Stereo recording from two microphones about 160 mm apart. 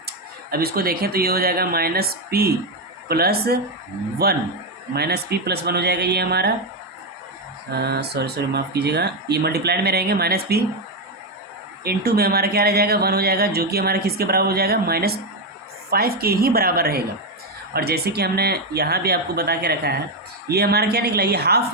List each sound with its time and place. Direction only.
0.5 s speech: 70° right (ahead or behind)
4.9 s speech: 90° right
7.7 s speech: 90° right
11.8 s speech: 75° right (ahead or behind)